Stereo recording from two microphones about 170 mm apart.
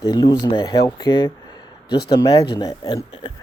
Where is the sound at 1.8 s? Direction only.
70° left (ahead or behind).